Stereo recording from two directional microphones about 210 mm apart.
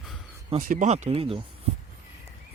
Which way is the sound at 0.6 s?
45° right (ahead or behind).